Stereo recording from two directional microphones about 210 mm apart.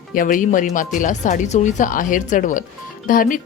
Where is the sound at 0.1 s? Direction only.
40° left (ahead or behind).